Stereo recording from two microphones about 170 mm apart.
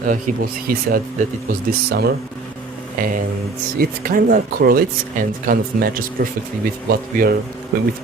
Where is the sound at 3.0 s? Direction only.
55° right (ahead or behind).